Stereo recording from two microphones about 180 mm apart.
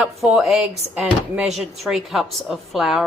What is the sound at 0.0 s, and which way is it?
Speech, centre (ahead or behind).